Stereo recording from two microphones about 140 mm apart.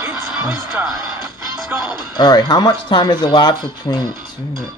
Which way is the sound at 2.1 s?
30° left (ahead or behind).